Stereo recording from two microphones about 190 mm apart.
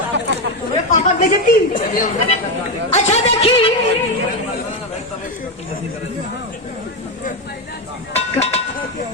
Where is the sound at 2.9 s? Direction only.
35° left (ahead or behind).